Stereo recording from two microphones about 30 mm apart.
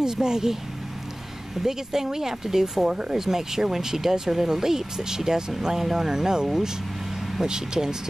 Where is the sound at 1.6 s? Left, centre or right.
Centre.